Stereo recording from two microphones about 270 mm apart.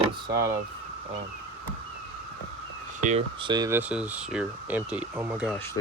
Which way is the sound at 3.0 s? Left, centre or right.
Right.